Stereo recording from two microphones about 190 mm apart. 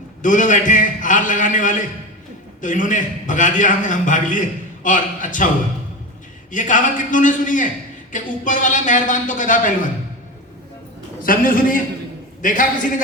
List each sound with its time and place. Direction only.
0.2 s a man's voice: 40° left (ahead or behind)
6.5 s a man's voice: 40° left (ahead or behind)
11.2 s a man's voice: 45° left (ahead or behind)